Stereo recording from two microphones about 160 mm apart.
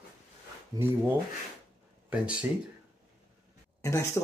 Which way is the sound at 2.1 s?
5° right (ahead or behind).